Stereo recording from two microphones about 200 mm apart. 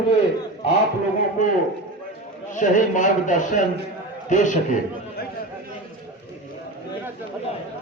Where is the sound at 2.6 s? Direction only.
40° left (ahead or behind).